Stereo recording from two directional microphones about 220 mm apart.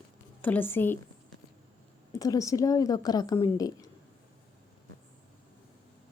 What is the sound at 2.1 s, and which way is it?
A woman's voice, 15° left (ahead or behind).